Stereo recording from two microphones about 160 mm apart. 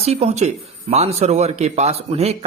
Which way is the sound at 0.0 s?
40° right (ahead or behind).